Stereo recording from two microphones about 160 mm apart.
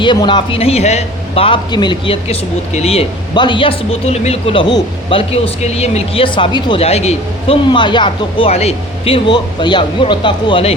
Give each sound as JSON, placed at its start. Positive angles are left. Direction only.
{"t": 0.0, "sound": "a man's voice", "side_deg": 30}